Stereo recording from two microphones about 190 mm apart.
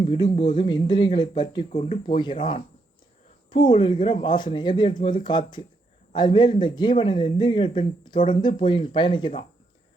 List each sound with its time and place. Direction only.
0.0 s speech: 25° left (ahead or behind)